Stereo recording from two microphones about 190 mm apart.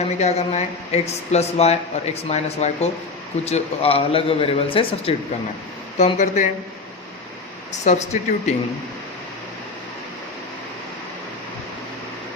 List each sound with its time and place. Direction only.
0.2 s a man's voice: 35° left (ahead or behind)
7.7 s speech: 35° left (ahead or behind)